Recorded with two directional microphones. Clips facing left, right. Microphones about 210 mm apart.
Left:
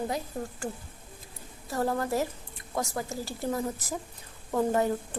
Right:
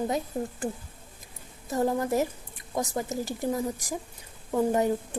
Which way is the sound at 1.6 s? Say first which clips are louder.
Right 3 dB; 20° right (ahead or behind).